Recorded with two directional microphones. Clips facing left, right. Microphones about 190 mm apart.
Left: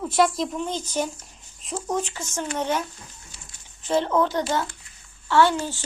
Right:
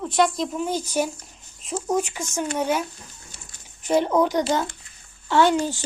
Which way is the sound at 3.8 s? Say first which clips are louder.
Right 2 dB; 15° right (ahead or behind).